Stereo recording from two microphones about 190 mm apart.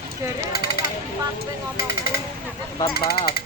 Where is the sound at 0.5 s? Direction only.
50° left (ahead or behind).